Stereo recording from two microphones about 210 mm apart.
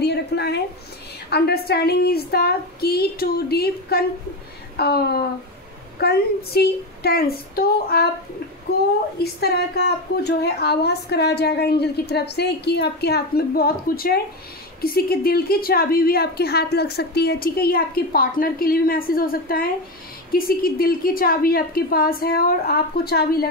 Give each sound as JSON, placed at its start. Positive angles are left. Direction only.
{"t": 0.0, "sound": "a woman's voice", "side_deg": 50}
{"t": 9.2, "sound": "a woman's voice", "side_deg": 50}